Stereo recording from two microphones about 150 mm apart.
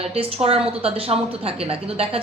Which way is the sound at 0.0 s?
40° right (ahead or behind).